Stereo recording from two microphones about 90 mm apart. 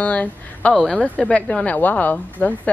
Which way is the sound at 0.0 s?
15° left (ahead or behind).